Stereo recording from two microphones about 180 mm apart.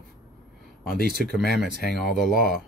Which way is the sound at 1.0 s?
60° right (ahead or behind).